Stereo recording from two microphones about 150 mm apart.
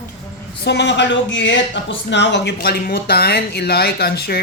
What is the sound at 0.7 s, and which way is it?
Speech, 90° left.